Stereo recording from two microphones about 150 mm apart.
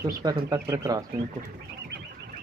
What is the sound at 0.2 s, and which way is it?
Speech, 25° right (ahead or behind).